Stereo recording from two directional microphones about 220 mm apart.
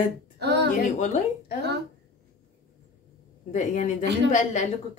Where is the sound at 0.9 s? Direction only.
35° left (ahead or behind).